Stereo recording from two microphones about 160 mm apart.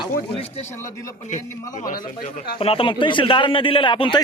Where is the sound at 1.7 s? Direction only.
60° left (ahead or behind).